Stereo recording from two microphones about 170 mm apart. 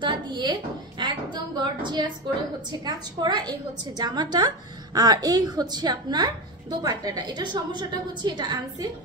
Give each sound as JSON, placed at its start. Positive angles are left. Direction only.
{"t": 0.0, "sound": "a woman's voice", "side_deg": -25}